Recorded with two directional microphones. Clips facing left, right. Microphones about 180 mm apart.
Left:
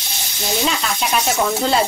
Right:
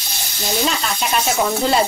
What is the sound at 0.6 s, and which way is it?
Speech, centre (ahead or behind).